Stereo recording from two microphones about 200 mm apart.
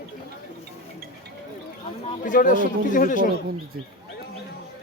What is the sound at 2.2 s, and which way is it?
Speech, 40° left (ahead or behind).